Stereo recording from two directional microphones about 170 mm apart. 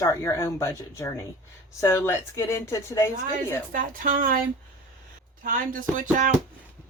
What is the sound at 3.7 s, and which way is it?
Speech, 55° right (ahead or behind).